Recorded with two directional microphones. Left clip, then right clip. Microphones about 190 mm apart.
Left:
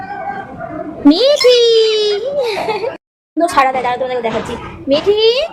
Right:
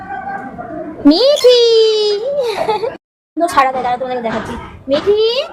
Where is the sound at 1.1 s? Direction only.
10° right (ahead or behind).